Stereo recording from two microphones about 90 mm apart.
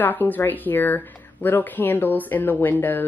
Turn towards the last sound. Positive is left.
turn(degrees=20)  # may be behind; listen again after turning